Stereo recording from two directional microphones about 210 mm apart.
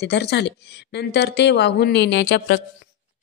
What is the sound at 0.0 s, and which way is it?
A woman's voice, 55° left (ahead or behind).